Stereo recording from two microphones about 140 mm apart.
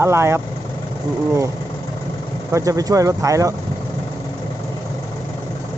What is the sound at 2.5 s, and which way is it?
Speech, 20° right (ahead or behind).